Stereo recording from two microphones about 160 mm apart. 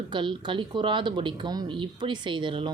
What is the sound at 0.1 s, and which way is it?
Speech, 30° right (ahead or behind).